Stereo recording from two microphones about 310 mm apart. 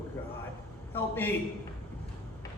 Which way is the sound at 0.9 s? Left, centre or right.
Centre.